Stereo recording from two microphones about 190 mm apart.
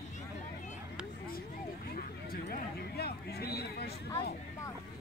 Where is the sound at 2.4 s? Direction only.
50° left (ahead or behind).